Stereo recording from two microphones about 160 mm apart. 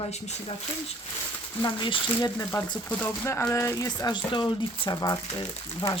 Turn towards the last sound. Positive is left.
turn(degrees=25)  # may be behind; listen again after turning